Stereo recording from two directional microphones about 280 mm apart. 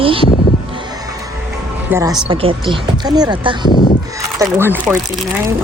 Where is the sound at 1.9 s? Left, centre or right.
Centre.